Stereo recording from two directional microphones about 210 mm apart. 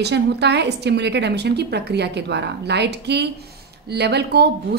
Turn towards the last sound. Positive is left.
turn(degrees=-50)  # may be behind; listen again after turning